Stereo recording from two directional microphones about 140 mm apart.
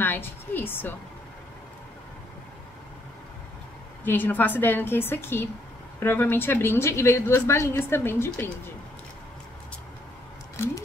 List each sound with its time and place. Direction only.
0.0 s a woman's voice: 15° left (ahead or behind)
4.0 s a woman's voice: 15° left (ahead or behind)